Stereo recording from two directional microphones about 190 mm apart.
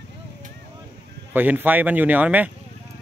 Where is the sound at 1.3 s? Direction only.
10° right (ahead or behind).